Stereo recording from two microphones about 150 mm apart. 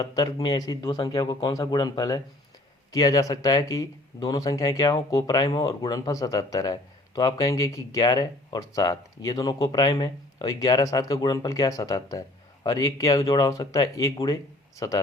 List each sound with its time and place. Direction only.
0.0 s speech: 25° left (ahead or behind)